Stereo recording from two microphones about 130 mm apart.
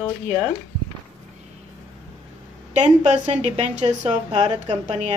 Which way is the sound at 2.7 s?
60° right (ahead or behind).